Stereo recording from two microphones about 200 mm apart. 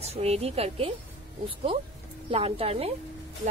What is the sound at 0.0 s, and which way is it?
Speech, 30° right (ahead or behind).